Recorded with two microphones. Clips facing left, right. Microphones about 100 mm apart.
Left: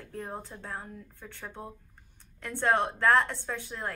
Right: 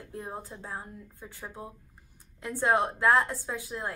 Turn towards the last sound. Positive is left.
turn(degrees=-5)  # may be behind; listen again after turning